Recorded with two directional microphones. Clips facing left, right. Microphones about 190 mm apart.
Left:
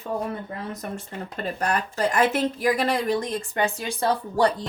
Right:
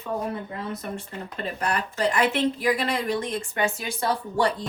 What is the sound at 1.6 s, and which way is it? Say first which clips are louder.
Speech: left 1 dB; 40° left (ahead or behind).